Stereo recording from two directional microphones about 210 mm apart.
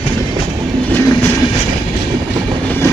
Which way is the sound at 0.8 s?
10° left (ahead or behind).